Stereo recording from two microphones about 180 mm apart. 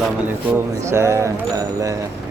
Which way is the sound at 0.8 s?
15° right (ahead or behind).